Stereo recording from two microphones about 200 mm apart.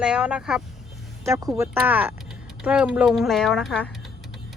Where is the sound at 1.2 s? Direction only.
15° right (ahead or behind).